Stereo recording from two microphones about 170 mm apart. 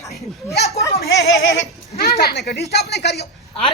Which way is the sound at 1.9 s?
65° left (ahead or behind).